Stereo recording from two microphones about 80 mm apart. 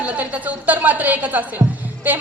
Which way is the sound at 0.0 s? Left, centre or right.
Centre.